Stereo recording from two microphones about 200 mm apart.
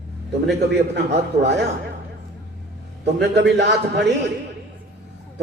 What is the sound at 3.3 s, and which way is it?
Speech, 60° right (ahead or behind).